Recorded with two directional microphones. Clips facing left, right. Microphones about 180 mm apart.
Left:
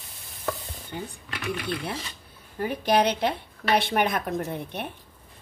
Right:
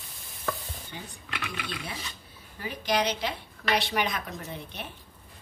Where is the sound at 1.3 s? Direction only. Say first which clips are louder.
Left 6 dB; 40° left (ahead or behind).